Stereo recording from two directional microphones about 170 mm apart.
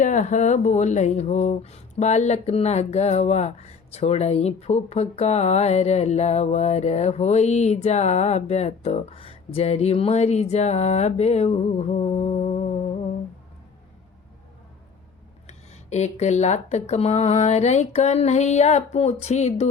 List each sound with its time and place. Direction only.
0.0 s speech: 45° left (ahead or behind)
15.4 s speech: 40° left (ahead or behind)